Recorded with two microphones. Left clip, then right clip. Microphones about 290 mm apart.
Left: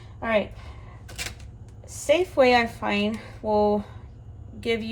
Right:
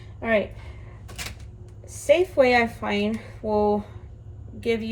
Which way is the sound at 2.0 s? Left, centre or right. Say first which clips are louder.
Right 1 dB; centre.